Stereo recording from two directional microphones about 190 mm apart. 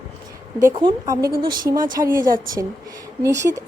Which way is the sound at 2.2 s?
45° right (ahead or behind).